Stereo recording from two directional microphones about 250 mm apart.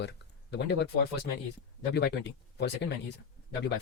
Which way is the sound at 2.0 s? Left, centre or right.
Left.